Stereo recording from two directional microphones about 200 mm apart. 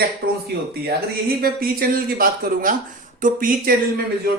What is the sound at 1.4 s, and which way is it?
Speech, 50° right (ahead or behind).